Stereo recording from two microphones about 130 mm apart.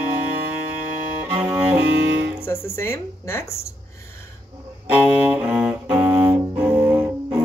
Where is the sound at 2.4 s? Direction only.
20° left (ahead or behind).